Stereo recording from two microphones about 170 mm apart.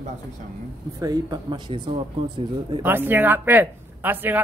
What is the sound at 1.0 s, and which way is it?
Speech, 20° right (ahead or behind).